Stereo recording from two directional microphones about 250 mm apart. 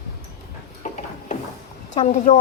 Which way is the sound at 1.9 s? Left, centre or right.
Left.